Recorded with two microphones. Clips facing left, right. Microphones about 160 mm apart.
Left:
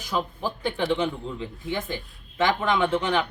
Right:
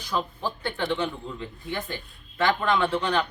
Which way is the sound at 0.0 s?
15° left (ahead or behind).